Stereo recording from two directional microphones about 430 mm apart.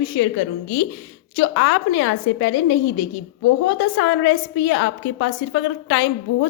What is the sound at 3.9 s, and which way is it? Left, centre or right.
A woman's voice, left.